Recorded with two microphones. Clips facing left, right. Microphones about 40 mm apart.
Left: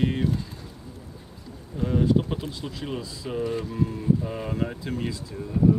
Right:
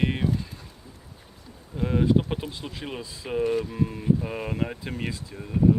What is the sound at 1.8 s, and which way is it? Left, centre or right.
Speech, right.